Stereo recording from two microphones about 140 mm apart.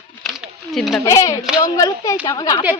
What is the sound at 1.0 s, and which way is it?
Speech, 20° left (ahead or behind).